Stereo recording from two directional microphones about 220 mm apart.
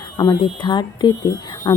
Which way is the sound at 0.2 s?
20° left (ahead or behind).